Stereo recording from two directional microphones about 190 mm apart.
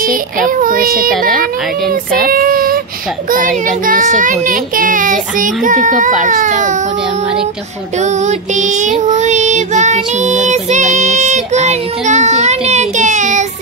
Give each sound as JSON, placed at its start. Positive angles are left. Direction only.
{"t": 0.0, "sound": "a child's voice", "side_deg": -45}
{"t": 6.2, "sound": "child singing", "side_deg": -40}
{"t": 8.0, "sound": "child singing", "side_deg": -40}